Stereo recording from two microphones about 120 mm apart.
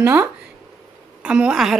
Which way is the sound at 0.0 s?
20° right (ahead or behind).